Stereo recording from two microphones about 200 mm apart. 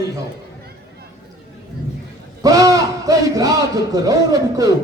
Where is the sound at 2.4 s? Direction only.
15° right (ahead or behind).